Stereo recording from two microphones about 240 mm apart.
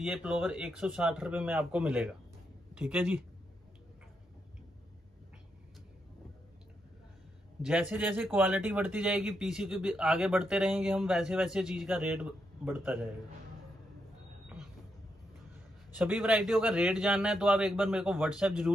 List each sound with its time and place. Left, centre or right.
0.0 s speech: centre
7.6 s speech: centre
16.0 s speech: centre